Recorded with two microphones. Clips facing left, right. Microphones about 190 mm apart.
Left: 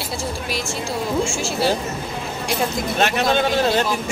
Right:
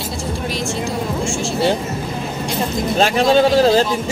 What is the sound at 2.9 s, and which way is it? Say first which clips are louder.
Speech: right 6 dB; 30° right (ahead or behind).